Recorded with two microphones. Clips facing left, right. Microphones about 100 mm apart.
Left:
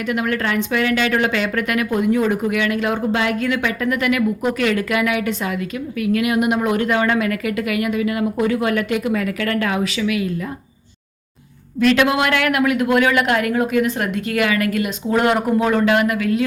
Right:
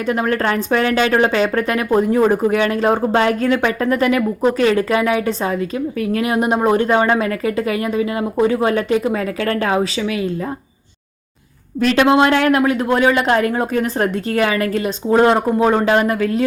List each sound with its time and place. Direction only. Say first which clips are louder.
0.0 s a woman's voice: right 3 dB; 35° right (ahead or behind)
11.8 s a woman's voice: right 3 dB; 30° right (ahead or behind)